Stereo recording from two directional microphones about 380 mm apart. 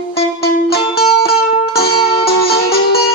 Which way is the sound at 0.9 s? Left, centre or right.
Left.